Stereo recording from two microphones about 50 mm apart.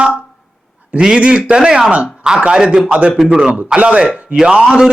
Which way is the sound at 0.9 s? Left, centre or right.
Centre.